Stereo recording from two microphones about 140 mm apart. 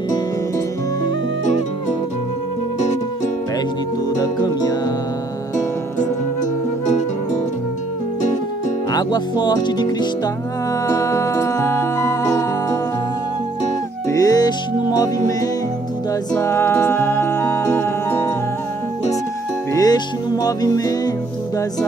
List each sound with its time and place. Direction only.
4.2 s music: 30° left (ahead or behind)
8.9 s speech: 30° left (ahead or behind)
10.9 s music: 20° left (ahead or behind)
14.0 s music: 25° left (ahead or behind)
16.3 s music: 20° left (ahead or behind)
19.7 s music: 30° left (ahead or behind)